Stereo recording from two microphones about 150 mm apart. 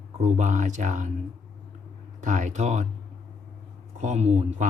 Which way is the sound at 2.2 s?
55° right (ahead or behind).